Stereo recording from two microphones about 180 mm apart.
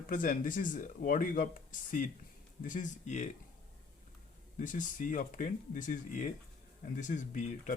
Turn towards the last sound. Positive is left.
turn(degrees=45)  # may be behind; listen again after turning